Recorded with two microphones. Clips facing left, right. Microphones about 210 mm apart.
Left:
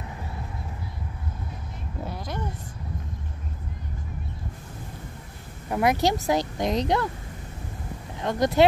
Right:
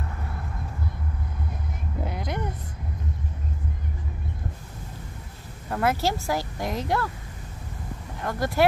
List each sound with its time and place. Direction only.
2.0 s a sound: 15° right (ahead or behind)
5.7 s a woman's voice: 15° left (ahead or behind)
8.2 s speech: 20° left (ahead or behind)